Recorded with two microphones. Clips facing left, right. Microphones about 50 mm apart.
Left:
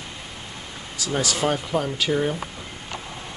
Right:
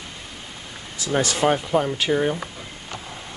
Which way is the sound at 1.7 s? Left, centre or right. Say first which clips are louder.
Right 3 dB; centre.